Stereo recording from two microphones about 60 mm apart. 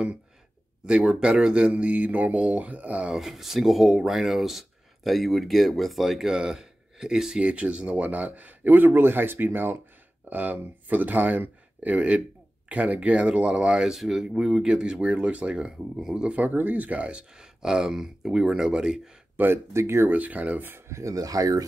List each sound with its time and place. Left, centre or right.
0.8 s speech: centre
3.2 s speech: centre
16.3 s speech: right; by 19.1 s centre
19.3 s speech: right
19.7 s speech: right
20.1 s speech: right
20.9 s speech: right